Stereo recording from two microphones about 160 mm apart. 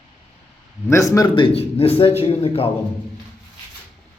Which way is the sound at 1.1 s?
30° left (ahead or behind).